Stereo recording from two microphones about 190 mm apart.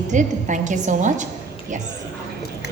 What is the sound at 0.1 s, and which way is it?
A woman's voice, 40° right (ahead or behind).